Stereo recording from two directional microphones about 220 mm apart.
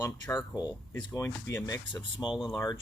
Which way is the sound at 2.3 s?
5° right (ahead or behind).